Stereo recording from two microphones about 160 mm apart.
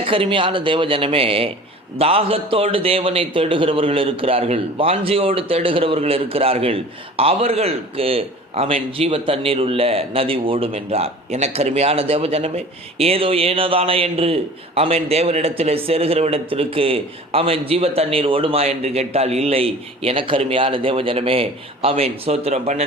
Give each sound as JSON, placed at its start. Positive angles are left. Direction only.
{"t": 0.0, "sound": "a man's voice", "side_deg": -35}